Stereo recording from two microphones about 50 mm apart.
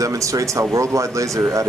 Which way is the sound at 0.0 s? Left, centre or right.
Right.